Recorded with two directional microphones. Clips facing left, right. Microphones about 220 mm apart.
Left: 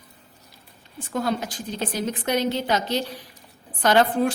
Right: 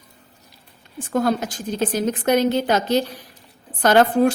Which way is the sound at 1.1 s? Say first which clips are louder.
Right 5 dB; 45° right (ahead or behind).